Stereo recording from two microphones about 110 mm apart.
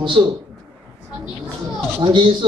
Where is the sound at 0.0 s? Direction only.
45° right (ahead or behind).